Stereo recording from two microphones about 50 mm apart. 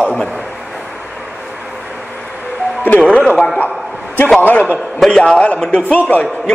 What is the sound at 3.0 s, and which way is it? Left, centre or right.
Speech, left.